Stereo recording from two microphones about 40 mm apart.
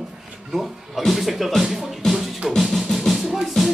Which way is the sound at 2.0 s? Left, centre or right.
Centre.